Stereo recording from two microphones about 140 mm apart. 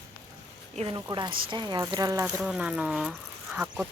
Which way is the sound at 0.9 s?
30° right (ahead or behind).